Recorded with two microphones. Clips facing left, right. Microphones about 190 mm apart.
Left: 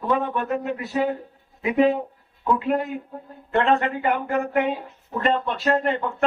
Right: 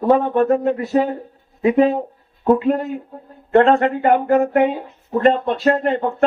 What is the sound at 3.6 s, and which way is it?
Speech, 50° right (ahead or behind).